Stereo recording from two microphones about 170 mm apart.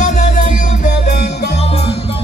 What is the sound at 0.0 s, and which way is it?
Music, 45° left (ahead or behind).